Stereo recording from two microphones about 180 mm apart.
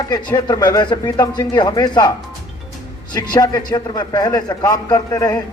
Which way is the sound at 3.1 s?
25° left (ahead or behind).